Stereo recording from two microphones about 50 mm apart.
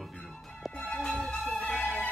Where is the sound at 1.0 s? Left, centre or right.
Centre.